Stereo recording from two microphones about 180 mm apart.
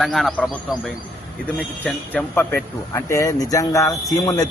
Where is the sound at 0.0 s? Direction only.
Centre (ahead or behind).